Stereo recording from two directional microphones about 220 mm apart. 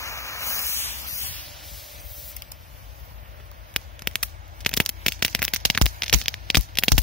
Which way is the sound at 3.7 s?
5° left (ahead or behind).